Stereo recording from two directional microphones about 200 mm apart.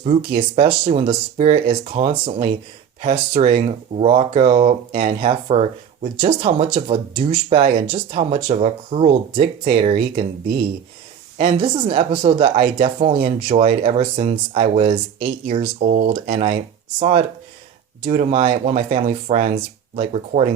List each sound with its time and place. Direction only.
0.0 s speech: 30° right (ahead or behind)
11.3 s speech: 25° right (ahead or behind)
17.0 s speech: 30° right (ahead or behind)